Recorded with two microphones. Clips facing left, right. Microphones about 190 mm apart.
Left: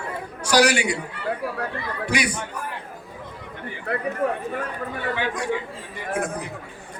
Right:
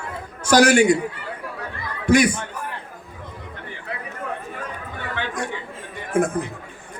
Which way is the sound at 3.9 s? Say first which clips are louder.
Left 7 dB; 60° left (ahead or behind).